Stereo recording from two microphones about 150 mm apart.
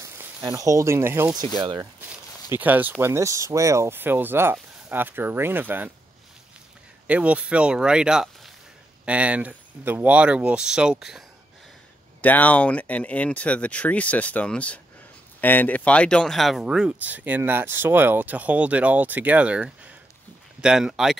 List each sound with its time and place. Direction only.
0.0 s speech: 20° right (ahead or behind)
1.6 s speech: 30° right (ahead or behind)
2.5 s speech: 10° right (ahead or behind)
7.1 s speech: 10° right (ahead or behind)
12.2 s speech: 10° left (ahead or behind)